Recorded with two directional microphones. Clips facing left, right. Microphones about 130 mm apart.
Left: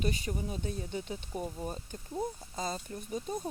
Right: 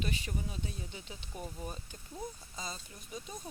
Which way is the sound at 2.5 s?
50° left (ahead or behind).